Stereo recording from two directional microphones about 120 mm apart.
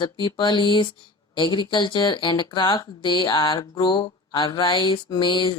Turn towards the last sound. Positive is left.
turn(degrees=40)  # may be behind; listen again after turning